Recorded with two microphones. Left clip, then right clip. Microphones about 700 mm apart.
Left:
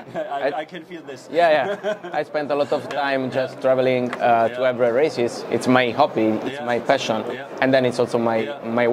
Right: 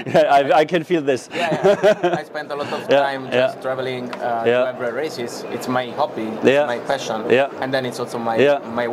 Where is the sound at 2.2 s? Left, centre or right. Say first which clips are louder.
Left 5 dB; left.